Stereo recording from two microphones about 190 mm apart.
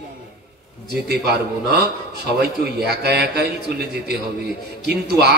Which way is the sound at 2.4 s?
60° right (ahead or behind).